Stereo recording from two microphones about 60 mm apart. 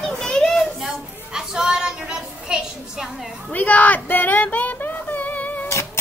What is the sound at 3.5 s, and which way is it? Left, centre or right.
Speech, left.